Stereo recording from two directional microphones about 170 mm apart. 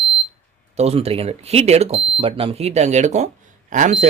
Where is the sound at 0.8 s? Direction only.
35° right (ahead or behind).